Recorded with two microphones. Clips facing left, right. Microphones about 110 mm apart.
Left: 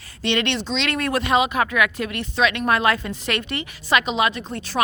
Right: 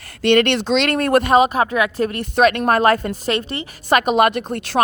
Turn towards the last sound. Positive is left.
turn(degrees=-60)  # may be behind; listen again after turning